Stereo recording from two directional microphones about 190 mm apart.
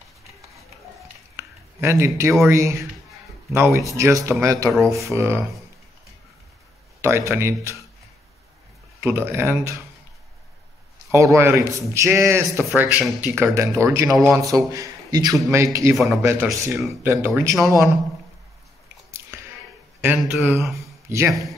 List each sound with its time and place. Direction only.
1.3 s a sound: 15° right (ahead or behind)
2.4 s a man's voice: 15° right (ahead or behind)
7.0 s a man's voice: 15° right (ahead or behind)
9.0 s a man's voice: 10° right (ahead or behind)
11.1 s a man's voice: 15° right (ahead or behind)
20.0 s speech: 5° right (ahead or behind)